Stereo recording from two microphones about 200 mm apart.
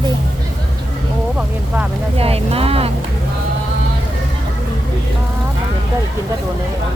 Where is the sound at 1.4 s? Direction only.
5° right (ahead or behind).